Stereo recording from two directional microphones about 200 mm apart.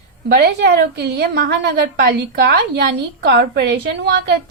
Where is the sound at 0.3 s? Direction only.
55° right (ahead or behind).